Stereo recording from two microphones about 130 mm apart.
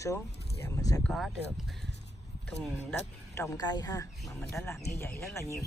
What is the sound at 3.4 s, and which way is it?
Speech, 30° left (ahead or behind).